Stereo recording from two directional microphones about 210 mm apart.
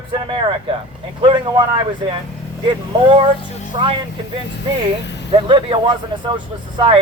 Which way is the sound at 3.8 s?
20° right (ahead or behind).